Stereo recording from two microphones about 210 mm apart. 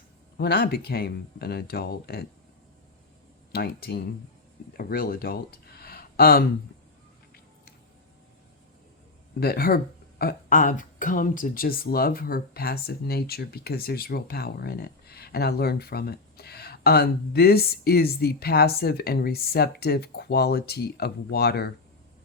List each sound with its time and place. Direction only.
0.3 s speech: 50° left (ahead or behind)
3.5 s speech: 45° left (ahead or behind)
9.4 s speech: 45° left (ahead or behind)